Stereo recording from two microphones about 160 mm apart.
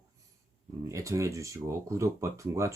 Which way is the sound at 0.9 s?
20° right (ahead or behind).